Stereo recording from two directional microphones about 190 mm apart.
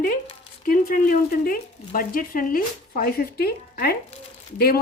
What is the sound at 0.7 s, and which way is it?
Speech, 50° left (ahead or behind).